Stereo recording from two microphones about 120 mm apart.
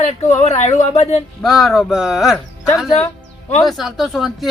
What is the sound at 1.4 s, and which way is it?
Speech, centre (ahead or behind).